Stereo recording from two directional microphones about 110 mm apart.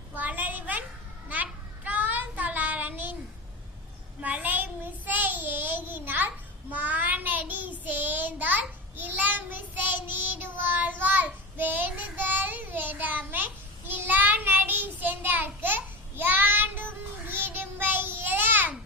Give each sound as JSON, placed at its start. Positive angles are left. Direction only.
{"t": 0.1, "sound": "a sound", "side_deg": -15}
{"t": 1.3, "sound": "child singing", "side_deg": -15}
{"t": 4.2, "sound": "child singing", "side_deg": -15}